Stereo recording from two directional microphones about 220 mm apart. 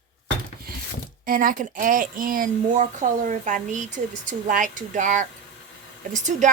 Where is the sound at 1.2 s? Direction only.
40° right (ahead or behind).